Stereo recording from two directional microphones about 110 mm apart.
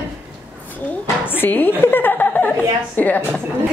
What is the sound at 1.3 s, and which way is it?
A woman's voice, 15° left (ahead or behind).